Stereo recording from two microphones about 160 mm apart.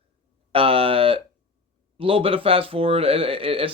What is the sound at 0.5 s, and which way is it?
Speech, 35° right (ahead or behind).